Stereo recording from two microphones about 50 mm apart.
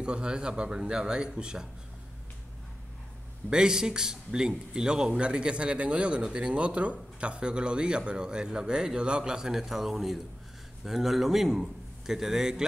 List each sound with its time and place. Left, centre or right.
0.0 s speech: centre
3.4 s a man's voice: centre